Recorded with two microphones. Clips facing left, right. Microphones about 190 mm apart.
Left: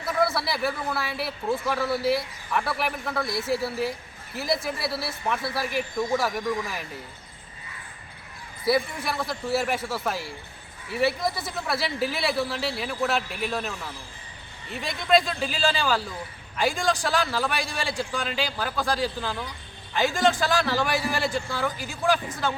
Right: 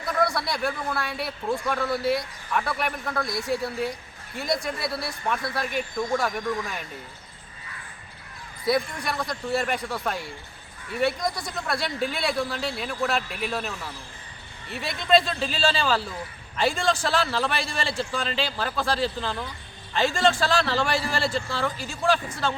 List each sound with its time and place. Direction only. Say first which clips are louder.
0.0 s a man's voice: even; 5° left (ahead or behind)
8.6 s a man's voice: left 1 dB; 5° left (ahead or behind)
14.9 s a man's voice: right 1 dB; 10° left (ahead or behind)
16.6 s a man's voice: right 1 dB; 15° left (ahead or behind)
17.1 s a man's voice: right 1 dB; 5° left (ahead or behind)